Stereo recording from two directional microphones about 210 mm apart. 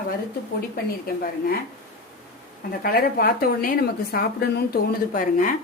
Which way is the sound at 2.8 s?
45° left (ahead or behind).